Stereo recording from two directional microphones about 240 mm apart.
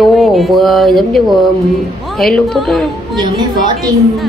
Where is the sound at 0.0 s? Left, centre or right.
Centre.